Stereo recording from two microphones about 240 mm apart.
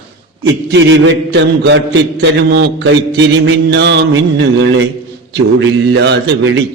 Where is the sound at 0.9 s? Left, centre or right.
Right.